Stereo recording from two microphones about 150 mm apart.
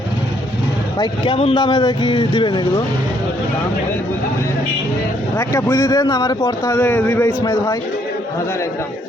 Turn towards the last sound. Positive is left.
turn(degrees=25)  # may be behind; listen again after turning